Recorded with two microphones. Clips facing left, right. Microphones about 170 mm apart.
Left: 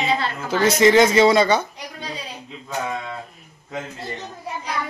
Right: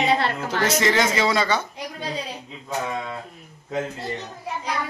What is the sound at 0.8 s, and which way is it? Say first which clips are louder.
Speech: left 10 dB; 20° left (ahead or behind).